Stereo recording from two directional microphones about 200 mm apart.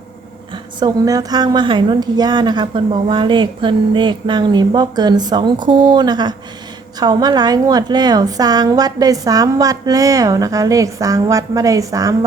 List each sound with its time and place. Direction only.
0.5 s a woman's voice: 20° right (ahead or behind)